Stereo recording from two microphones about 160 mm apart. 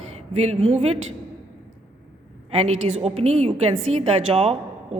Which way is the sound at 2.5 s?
45° right (ahead or behind).